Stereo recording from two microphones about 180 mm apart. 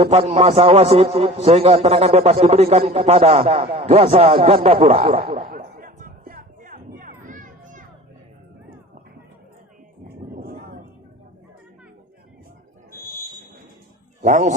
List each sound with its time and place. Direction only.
0.0 s a man's voice: 35° right (ahead or behind)
5.3 s a sound: 50° right (ahead or behind)
14.2 s a man's voice: 40° right (ahead or behind)